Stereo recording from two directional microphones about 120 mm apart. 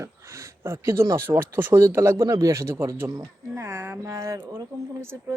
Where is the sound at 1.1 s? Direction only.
20° right (ahead or behind).